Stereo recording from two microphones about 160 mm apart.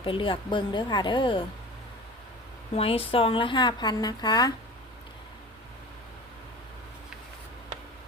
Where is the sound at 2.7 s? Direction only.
35° left (ahead or behind).